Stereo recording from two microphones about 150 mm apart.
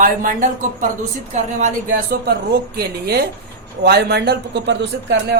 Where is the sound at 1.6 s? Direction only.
75° right (ahead or behind).